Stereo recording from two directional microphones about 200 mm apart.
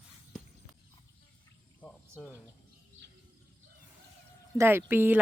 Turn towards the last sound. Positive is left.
turn(degrees=-10)  # may be behind; listen again after turning